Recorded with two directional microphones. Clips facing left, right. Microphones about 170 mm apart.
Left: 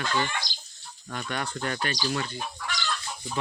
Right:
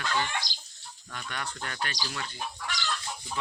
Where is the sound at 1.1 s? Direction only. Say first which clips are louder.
Left 6 dB; 35° left (ahead or behind).